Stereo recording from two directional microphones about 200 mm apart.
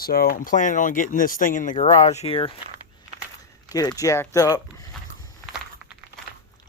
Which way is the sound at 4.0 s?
15° left (ahead or behind).